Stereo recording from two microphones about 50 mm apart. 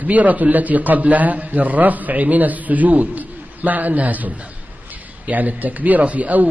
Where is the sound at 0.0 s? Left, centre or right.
Right.